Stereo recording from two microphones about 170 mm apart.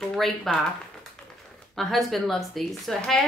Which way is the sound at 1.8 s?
Centre (ahead or behind).